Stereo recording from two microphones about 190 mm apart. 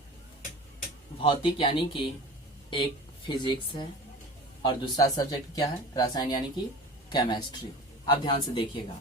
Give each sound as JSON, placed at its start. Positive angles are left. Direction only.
{"t": 1.2, "sound": "speech", "side_deg": 25}